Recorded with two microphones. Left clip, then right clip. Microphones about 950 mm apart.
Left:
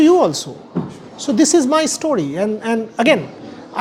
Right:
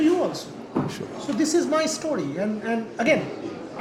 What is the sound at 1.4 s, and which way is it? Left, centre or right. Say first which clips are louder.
Speech: left 8 dB; left.